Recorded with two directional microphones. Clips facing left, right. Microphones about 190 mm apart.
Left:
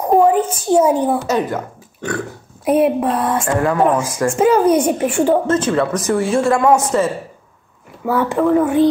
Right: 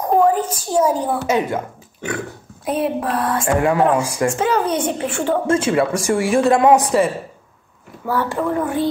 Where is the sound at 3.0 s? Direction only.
25° left (ahead or behind).